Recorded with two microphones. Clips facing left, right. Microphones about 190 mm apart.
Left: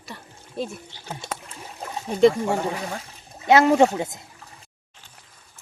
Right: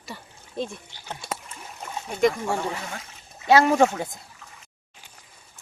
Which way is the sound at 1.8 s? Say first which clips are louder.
Left 5 dB; 35° left (ahead or behind).